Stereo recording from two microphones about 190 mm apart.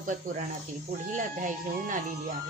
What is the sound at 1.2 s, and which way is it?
Speech, 45° right (ahead or behind).